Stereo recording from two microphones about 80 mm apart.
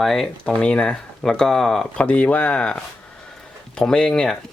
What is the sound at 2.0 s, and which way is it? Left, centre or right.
Speech, centre.